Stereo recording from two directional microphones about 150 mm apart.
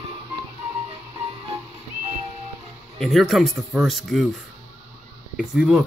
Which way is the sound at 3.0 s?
Centre (ahead or behind).